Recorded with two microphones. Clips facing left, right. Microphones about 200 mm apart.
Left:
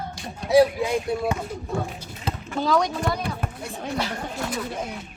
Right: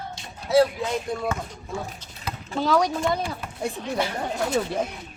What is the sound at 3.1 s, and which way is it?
Speech, 55° left (ahead or behind).